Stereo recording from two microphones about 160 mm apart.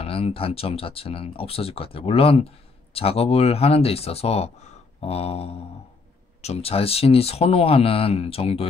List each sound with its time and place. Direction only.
0.0 s speech: 35° left (ahead or behind)